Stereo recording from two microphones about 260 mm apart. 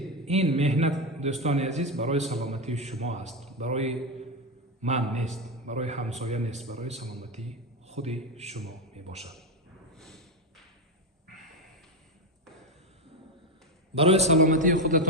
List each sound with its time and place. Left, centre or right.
0.3 s a man's voice: right
9.9 s snort: centre
13.9 s a man's voice: right